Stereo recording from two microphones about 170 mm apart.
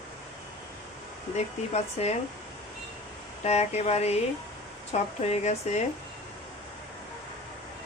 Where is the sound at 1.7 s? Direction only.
40° left (ahead or behind).